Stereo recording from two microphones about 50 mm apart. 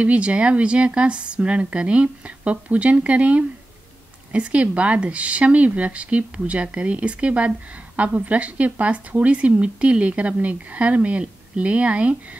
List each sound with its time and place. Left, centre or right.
0.0 s speech: right